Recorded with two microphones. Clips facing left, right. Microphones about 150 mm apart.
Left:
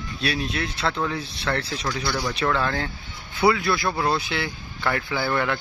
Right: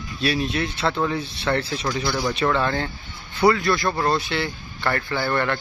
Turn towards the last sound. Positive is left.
turn(degrees=5)  # may be behind; listen again after turning